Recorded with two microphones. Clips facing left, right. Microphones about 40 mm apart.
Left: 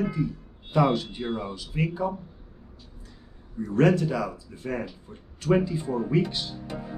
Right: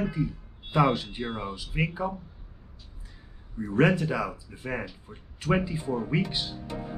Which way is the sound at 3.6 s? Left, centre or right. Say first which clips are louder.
Left 2 dB; centre.